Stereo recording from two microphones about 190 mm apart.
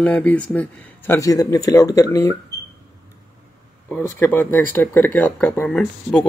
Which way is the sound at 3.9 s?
10° left (ahead or behind).